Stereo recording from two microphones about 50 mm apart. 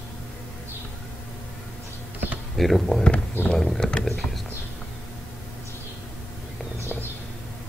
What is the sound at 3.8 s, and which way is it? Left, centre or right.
Speech, centre.